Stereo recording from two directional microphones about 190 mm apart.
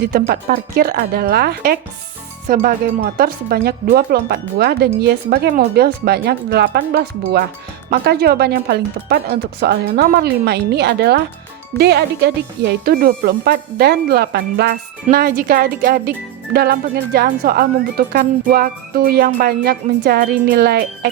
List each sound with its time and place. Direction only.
0.0 s speech: 50° right (ahead or behind)